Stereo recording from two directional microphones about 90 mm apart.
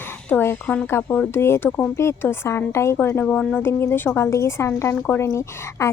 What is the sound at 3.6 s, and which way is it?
Speech, 25° left (ahead or behind).